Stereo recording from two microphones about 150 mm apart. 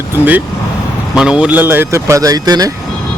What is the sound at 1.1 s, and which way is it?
Speech, 5° right (ahead or behind).